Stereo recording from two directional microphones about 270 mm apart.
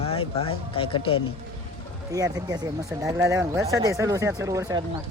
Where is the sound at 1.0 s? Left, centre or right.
Left.